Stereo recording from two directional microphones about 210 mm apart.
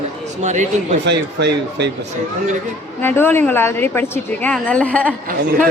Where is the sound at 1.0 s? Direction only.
55° right (ahead or behind).